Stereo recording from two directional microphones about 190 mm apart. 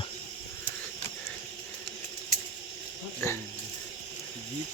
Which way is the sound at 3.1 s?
15° left (ahead or behind).